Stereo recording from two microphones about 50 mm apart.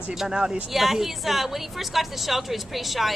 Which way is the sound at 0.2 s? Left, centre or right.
Centre.